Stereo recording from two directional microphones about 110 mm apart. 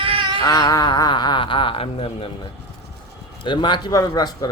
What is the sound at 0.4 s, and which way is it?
Speech, 35° left (ahead or behind).